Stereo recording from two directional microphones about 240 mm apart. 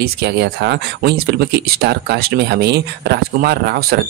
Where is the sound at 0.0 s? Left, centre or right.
Right.